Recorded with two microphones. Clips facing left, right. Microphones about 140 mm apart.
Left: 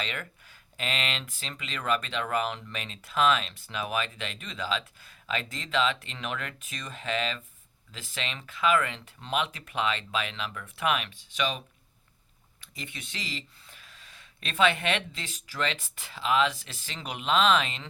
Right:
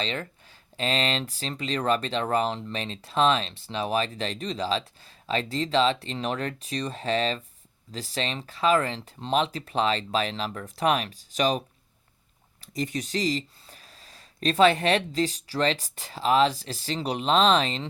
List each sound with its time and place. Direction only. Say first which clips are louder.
0.0 s speech: right 5 dB; 30° right (ahead or behind)
12.6 s speech: right 13 dB; 40° right (ahead or behind)